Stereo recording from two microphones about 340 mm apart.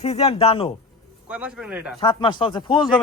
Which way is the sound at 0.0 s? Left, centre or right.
Centre.